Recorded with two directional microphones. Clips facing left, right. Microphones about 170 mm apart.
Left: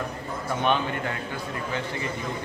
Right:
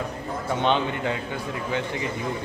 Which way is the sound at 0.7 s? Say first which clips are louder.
Right 2 dB; 20° right (ahead or behind).